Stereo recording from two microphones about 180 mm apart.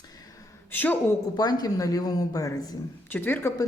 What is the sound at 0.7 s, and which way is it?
Speech, 10° left (ahead or behind).